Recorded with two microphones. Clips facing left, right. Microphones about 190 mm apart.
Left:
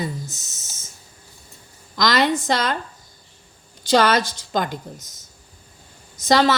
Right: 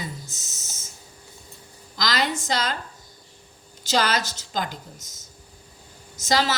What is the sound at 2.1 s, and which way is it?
Speech, 55° left (ahead or behind).